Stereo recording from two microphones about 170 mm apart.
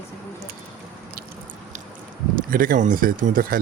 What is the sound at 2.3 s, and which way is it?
Speech, 55° right (ahead or behind).